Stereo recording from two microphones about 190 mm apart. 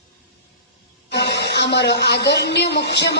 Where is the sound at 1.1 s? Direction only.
65° left (ahead or behind).